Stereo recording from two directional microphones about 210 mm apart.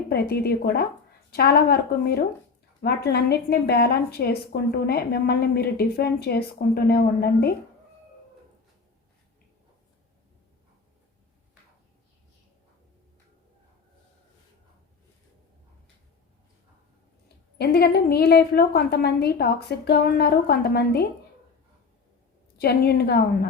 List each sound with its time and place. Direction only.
0.1 s a woman's voice: 50° left (ahead or behind)
17.6 s a woman's voice: 50° left (ahead or behind)
22.5 s a woman's voice: 50° left (ahead or behind)